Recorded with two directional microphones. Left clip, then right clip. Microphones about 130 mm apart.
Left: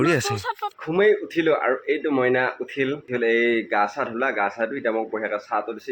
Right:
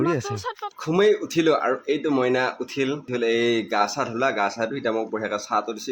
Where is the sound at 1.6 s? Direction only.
5° right (ahead or behind); by 5.6 s 20° right (ahead or behind).